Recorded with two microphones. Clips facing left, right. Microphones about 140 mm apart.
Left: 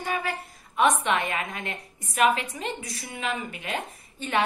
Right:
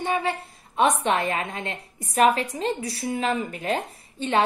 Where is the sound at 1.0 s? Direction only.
35° right (ahead or behind).